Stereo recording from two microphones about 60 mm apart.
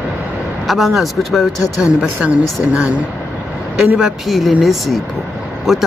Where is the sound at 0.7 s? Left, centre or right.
Centre.